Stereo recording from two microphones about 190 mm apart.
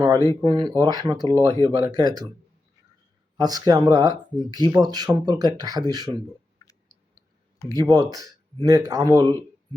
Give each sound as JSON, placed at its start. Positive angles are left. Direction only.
{"t": 0.0, "sound": "speech", "side_deg": -20}
{"t": 3.3, "sound": "speech", "side_deg": -20}
{"t": 6.6, "sound": "a sound", "side_deg": 20}
{"t": 7.7, "sound": "speech", "side_deg": -20}